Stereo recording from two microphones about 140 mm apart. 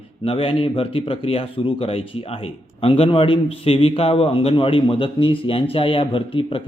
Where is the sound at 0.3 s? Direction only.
40° left (ahead or behind).